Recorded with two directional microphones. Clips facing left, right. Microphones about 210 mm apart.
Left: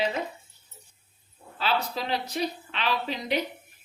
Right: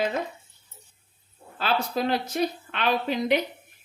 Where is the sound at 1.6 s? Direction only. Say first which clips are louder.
Right 3 dB; 50° right (ahead or behind).